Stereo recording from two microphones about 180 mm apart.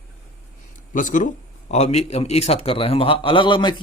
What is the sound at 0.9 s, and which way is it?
Speech, 45° left (ahead or behind).